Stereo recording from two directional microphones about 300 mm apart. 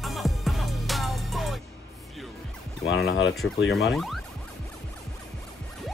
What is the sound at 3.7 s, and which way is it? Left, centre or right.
Speech, centre.